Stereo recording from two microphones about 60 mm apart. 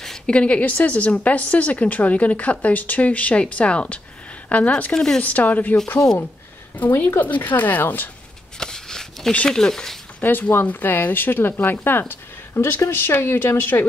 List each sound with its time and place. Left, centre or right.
0.3 s a woman's voice: left
4.9 s speech: centre
5.2 s a woman's voice: left
6.9 s speech: left
8.5 s shuffling cards: centre
9.5 s speech: centre
10.5 s speech: left